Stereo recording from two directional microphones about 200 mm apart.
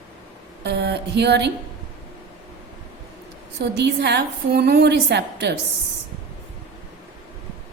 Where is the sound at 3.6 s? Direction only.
55° right (ahead or behind).